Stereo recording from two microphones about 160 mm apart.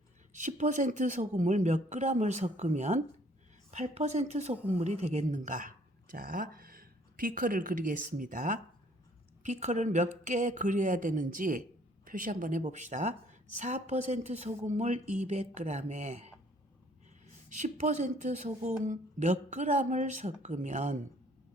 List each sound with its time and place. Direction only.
0.3 s a woman's voice: 50° right (ahead or behind)
17.5 s a woman's voice: 50° right (ahead or behind)